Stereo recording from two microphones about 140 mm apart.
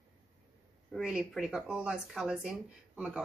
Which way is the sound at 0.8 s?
Centre (ahead or behind).